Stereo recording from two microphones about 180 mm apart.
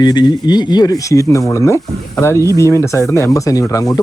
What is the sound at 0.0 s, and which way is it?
Speech, 25° left (ahead or behind).